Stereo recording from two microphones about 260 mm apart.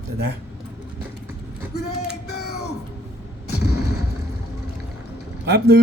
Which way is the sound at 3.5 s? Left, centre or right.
Left.